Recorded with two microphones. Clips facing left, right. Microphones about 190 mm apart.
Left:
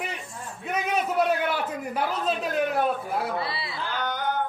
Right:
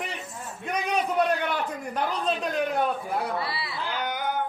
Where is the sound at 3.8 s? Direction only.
10° right (ahead or behind).